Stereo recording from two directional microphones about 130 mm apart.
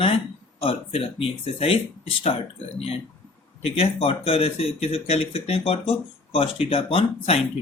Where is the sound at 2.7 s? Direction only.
50° left (ahead or behind).